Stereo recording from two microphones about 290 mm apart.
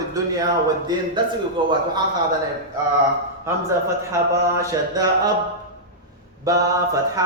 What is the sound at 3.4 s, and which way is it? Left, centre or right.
Speech, centre.